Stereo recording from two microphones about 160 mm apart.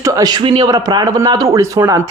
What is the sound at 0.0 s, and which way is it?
Speech, 20° right (ahead or behind).